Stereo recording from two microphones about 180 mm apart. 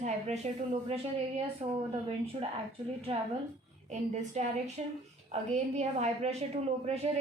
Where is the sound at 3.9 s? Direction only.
40° right (ahead or behind).